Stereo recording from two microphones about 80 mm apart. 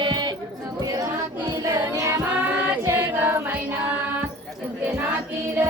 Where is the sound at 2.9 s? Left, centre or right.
Right.